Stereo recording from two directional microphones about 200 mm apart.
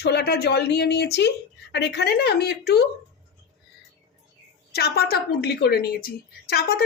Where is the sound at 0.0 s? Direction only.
55° left (ahead or behind).